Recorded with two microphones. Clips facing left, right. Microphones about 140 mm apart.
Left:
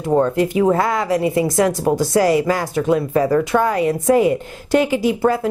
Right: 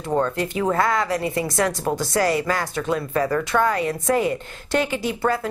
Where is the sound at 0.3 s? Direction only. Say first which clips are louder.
Left 7 dB; 10° left (ahead or behind).